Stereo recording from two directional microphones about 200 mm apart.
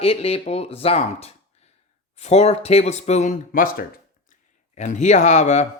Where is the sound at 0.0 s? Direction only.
30° left (ahead or behind).